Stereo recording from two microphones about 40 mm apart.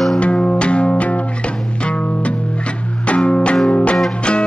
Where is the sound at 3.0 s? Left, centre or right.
Left.